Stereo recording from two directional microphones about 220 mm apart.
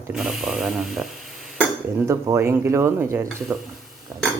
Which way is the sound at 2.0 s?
15° right (ahead or behind).